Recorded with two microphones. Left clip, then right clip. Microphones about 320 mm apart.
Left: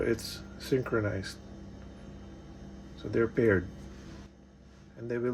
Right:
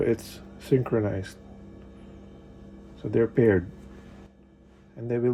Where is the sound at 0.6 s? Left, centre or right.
Centre.